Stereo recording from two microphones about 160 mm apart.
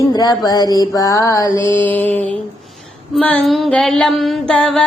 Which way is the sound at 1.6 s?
10° left (ahead or behind).